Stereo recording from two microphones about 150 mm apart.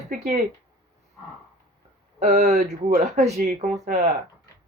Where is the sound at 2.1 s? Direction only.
50° right (ahead or behind).